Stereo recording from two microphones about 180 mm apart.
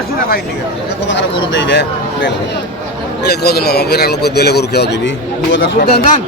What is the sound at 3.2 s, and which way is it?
Speech, 60° left (ahead or behind).